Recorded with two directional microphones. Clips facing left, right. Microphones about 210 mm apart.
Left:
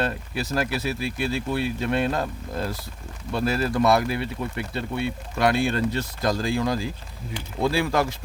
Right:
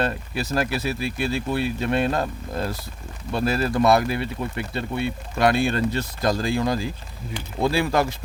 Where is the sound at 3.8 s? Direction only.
45° right (ahead or behind).